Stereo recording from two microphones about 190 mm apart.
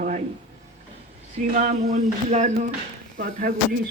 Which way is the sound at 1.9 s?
40° right (ahead or behind).